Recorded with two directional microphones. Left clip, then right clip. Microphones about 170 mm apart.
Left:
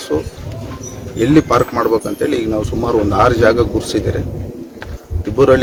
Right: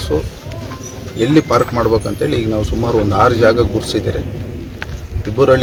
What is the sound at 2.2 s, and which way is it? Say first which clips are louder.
Speech: even; 40° left (ahead or behind).